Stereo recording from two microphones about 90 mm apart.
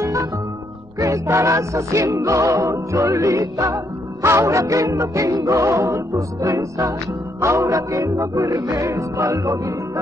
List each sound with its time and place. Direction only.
0.0 s music: 35° right (ahead or behind)